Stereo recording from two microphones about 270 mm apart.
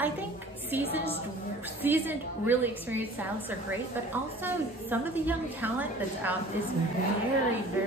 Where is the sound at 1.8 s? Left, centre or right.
Centre.